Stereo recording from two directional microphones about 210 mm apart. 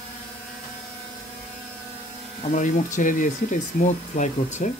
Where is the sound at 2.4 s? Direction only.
35° left (ahead or behind).